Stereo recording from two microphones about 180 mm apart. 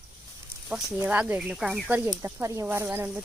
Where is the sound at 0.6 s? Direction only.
5° right (ahead or behind).